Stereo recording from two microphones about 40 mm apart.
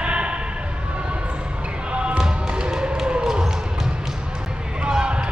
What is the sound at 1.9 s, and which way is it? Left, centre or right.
Basketball bounce, right.